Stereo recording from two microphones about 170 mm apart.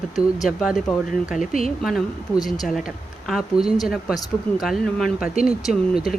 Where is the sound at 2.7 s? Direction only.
Centre (ahead or behind).